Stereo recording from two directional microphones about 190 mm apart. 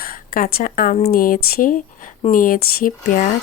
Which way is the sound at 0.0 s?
50° left (ahead or behind).